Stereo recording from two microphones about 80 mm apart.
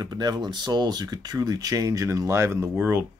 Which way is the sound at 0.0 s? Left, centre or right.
Right.